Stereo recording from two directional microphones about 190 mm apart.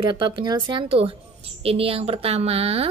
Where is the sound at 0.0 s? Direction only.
25° right (ahead or behind).